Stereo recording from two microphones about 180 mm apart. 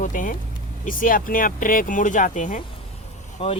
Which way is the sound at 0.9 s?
50° left (ahead or behind).